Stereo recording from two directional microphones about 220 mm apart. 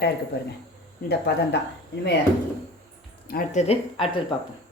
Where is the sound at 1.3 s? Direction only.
50° left (ahead or behind).